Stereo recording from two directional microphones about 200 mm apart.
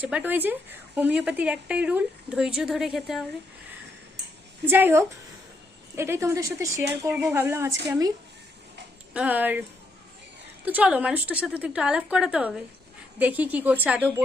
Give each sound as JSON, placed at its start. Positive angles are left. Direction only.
{"t": 0.0, "sound": "speech", "side_deg": -10}
{"t": 4.6, "sound": "speech", "side_deg": -10}
{"t": 9.1, "sound": "speech", "side_deg": -10}
{"t": 10.7, "sound": "speech", "side_deg": -5}